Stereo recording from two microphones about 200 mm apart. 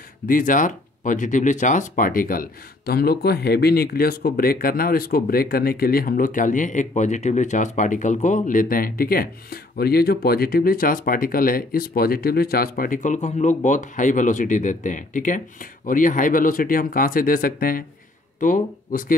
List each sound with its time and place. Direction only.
0.3 s speech: 40° left (ahead or behind)